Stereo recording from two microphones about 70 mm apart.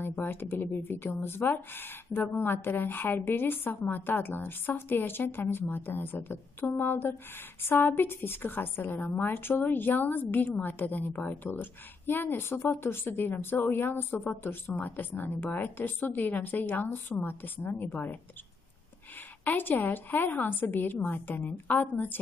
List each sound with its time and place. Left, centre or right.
0.0 s a woman's voice: left
19.4 s a woman's voice: left